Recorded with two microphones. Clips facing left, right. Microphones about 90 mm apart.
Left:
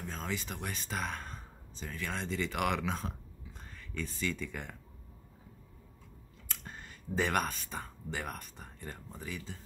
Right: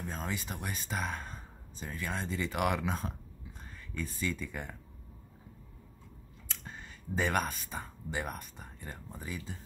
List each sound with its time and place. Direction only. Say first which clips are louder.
0.1 s speech: left 1 dB; 15° right (ahead or behind)
6.6 s speech: right 1 dB; centre (ahead or behind)